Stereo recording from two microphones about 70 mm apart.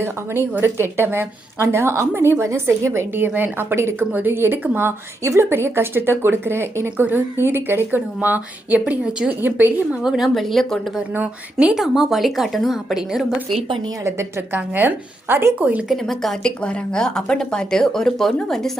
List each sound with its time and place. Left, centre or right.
0.6 s a woman's voice: right
3.2 s a woman's voice: right
8.8 s a woman's voice: centre
9.4 s a woman's voice: right
10.0 s a woman's voice: centre
14.0 s a woman's voice: right
14.5 s a woman's voice: right
15.9 s a woman's voice: centre